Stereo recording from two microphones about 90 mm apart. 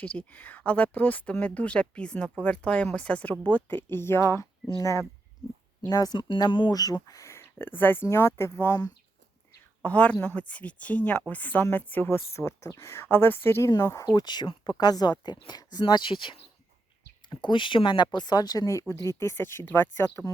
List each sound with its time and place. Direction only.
0.0 s speech: 15° left (ahead or behind); by 6.1 s 45° left (ahead or behind)
6.1 s speech: 60° left (ahead or behind)
6.7 s speech: 45° left (ahead or behind); by 8.8 s 30° left (ahead or behind)
9.8 s speech: 15° left (ahead or behind)
13.7 s speech: 40° left (ahead or behind)